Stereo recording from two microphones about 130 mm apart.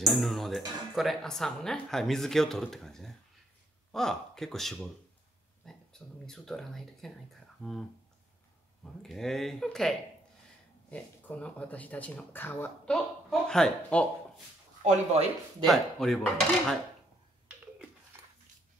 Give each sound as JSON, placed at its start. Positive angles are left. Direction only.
{"t": 0.0, "sound": "speech", "side_deg": 0}
{"t": 9.0, "sound": "speech", "side_deg": 5}
{"t": 14.8, "sound": "speech", "side_deg": -65}
{"t": 15.6, "sound": "speech", "side_deg": 0}